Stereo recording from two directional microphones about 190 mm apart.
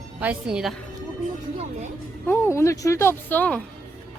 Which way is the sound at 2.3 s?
15° left (ahead or behind).